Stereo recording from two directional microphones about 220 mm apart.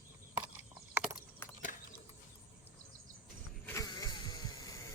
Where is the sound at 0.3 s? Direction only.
5° right (ahead or behind).